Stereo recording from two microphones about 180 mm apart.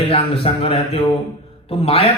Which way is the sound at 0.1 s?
35° left (ahead or behind).